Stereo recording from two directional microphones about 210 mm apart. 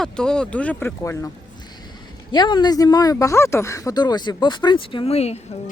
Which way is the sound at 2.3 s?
20° left (ahead or behind).